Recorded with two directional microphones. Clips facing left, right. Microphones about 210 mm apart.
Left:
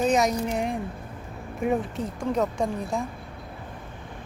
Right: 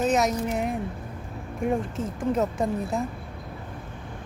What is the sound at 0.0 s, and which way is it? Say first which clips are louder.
Speech: left 1 dB; 5° right (ahead or behind).